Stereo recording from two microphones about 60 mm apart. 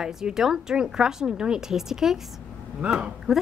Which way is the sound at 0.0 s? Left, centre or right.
Centre.